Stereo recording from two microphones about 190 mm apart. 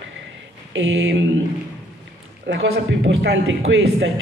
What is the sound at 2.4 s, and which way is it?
A man's voice, 75° right (ahead or behind).